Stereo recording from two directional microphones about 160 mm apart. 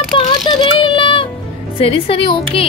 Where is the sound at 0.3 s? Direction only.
30° left (ahead or behind).